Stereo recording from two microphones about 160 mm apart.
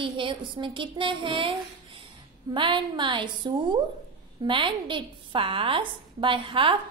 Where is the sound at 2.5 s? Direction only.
30° right (ahead or behind).